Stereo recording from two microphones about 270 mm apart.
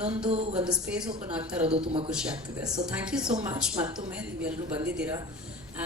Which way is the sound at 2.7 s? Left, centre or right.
Centre.